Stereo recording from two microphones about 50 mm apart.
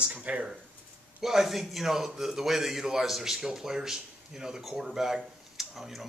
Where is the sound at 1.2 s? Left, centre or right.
Centre.